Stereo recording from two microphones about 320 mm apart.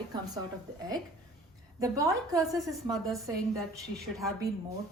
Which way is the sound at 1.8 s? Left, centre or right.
Centre.